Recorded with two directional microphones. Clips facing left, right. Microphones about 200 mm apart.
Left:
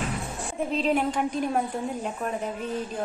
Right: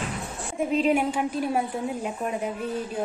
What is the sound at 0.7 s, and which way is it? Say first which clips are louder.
A woman's voice: right 3 dB; 10° right (ahead or behind).